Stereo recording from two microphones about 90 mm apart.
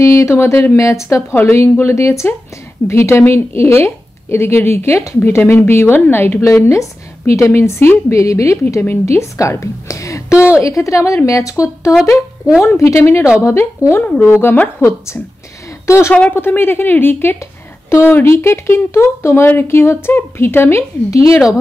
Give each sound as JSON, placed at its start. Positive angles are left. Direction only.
{"t": 0.0, "sound": "a woman's voice", "side_deg": 35}
{"t": 0.7, "sound": "a woman's voice", "side_deg": 35}
{"t": 16.1, "sound": "a woman's voice", "side_deg": 20}
{"t": 21.1, "sound": "a woman's voice", "side_deg": 40}